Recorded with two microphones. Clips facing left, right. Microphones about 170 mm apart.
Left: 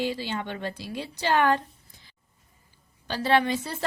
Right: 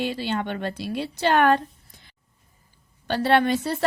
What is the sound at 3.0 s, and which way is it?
Speech, 60° right (ahead or behind).